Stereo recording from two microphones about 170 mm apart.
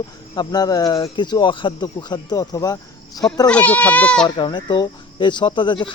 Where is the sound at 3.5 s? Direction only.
10° left (ahead or behind).